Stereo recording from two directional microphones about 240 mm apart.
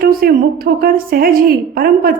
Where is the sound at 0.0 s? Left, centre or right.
Right.